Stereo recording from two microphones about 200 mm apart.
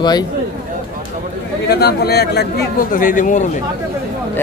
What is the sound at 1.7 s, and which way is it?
A man's voice, 55° left (ahead or behind).